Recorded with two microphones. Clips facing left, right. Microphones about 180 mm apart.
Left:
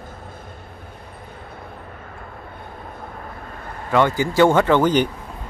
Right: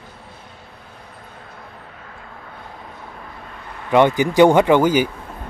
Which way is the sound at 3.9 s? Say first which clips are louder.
Right 3 dB; 20° right (ahead or behind).